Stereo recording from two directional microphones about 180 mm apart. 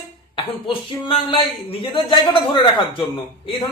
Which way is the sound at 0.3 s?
30° left (ahead or behind).